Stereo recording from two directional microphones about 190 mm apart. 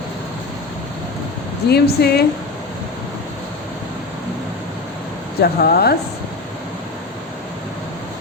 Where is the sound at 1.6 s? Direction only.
60° left (ahead or behind).